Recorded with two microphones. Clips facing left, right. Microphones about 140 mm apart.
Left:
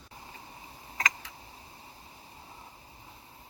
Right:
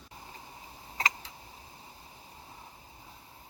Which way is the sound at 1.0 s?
30° right (ahead or behind).